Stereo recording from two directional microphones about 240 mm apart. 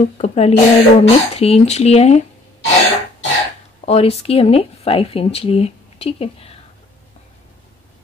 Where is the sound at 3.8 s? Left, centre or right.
Left.